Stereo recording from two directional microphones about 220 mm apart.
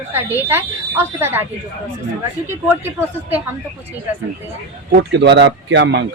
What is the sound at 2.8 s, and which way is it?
Speech, 10° right (ahead or behind).